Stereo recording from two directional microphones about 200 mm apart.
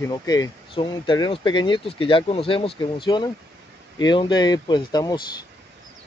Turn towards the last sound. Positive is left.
turn(degrees=20)  # may be behind; listen again after turning